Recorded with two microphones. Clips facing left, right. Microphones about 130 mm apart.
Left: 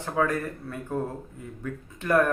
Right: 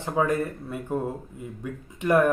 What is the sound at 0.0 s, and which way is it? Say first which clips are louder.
Speech: right 2 dB; 15° right (ahead or behind).